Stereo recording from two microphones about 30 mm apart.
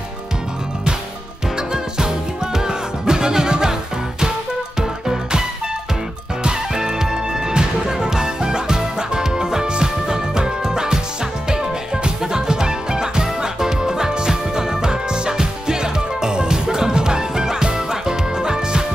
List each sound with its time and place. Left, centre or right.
1.7 s music: right
4.7 s music: right
6.7 s music: right